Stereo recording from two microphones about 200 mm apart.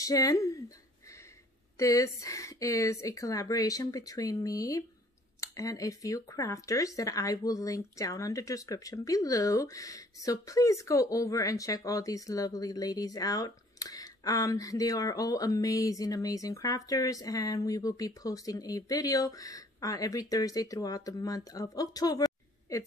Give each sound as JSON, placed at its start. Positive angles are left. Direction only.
{"t": 0.0, "sound": "speech", "side_deg": 15}
{"t": 1.8, "sound": "speech", "side_deg": 15}